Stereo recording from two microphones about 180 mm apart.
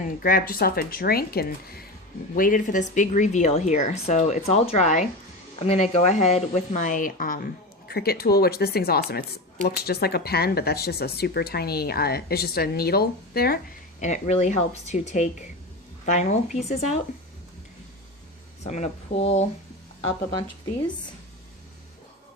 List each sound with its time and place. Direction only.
0.0 s speech: 50° left (ahead or behind)
14.0 s speech: 40° left (ahead or behind)
18.6 s speech: 35° left (ahead or behind)